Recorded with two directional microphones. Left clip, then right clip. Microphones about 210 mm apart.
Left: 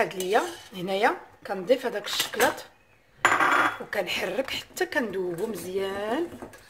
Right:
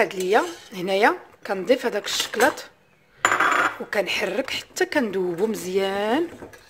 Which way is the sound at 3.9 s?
20° right (ahead or behind).